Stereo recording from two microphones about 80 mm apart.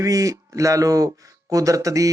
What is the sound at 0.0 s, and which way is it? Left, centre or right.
Speech, right.